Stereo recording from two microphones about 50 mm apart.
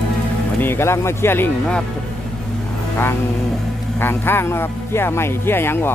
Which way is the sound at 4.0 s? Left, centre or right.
Left.